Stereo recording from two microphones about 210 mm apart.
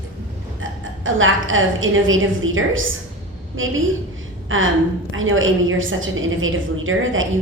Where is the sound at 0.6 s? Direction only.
70° right (ahead or behind).